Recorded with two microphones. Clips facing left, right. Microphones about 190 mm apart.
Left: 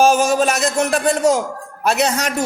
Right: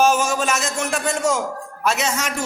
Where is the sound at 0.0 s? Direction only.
35° left (ahead or behind).